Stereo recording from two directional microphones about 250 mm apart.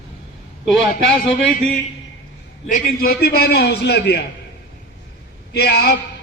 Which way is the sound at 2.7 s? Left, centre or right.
Left.